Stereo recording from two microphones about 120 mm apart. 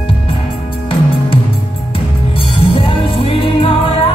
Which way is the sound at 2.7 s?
50° left (ahead or behind).